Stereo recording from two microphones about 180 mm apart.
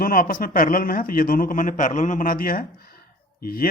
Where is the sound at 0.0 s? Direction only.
55° left (ahead or behind).